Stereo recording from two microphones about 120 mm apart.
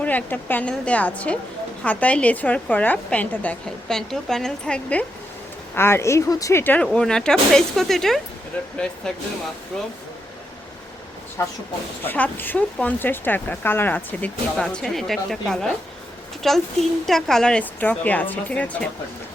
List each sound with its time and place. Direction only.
0.0 s speech: 15° left (ahead or behind)
5.7 s speech: 20° left (ahead or behind)
6.8 s speech: 5° left (ahead or behind)
11.4 s speech: 20° left (ahead or behind)